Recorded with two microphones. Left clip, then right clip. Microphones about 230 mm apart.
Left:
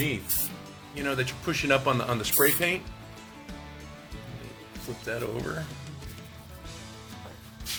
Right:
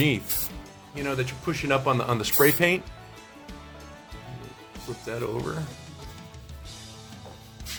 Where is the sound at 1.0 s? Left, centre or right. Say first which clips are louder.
Even; centre.